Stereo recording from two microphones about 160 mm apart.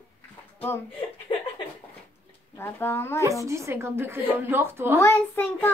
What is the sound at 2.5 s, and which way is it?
Speech, 15° left (ahead or behind).